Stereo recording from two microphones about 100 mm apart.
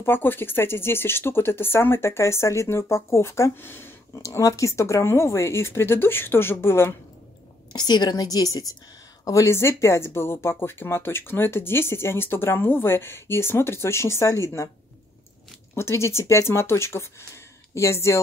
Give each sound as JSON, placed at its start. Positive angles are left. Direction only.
{"t": 0.0, "sound": "speech", "side_deg": 20}
{"t": 4.2, "sound": "speech", "side_deg": 35}
{"t": 7.7, "sound": "a woman's voice", "side_deg": 45}
{"t": 15.7, "sound": "speech", "side_deg": 25}